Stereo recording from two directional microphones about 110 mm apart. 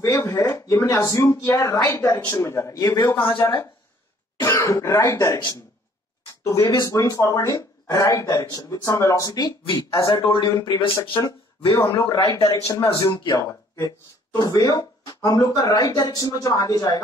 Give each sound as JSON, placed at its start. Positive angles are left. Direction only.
{"t": 0.0, "sound": "a man's voice", "side_deg": 30}
{"t": 3.3, "sound": "a man's voice", "side_deg": 20}
{"t": 6.4, "sound": "speech", "side_deg": 30}
{"t": 9.7, "sound": "speech", "side_deg": 50}
{"t": 11.6, "sound": "a man's voice", "side_deg": 30}